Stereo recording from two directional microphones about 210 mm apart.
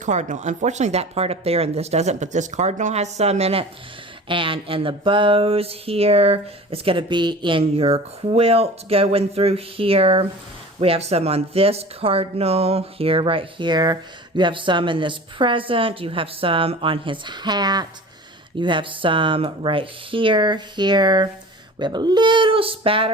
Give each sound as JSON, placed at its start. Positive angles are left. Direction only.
{"t": 0.0, "sound": "speech", "side_deg": -35}